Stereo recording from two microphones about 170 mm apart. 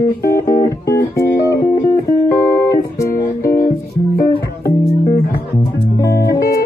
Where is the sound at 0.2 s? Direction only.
60° left (ahead or behind).